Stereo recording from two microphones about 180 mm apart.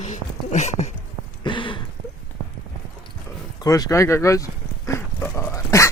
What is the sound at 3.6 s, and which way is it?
Dog, 20° left (ahead or behind).